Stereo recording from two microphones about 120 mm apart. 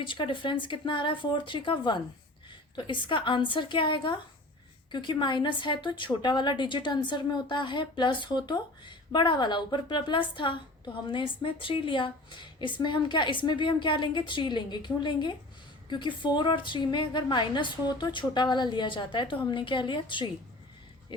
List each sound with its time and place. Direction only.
0.1 s a woman's voice: 45° left (ahead or behind)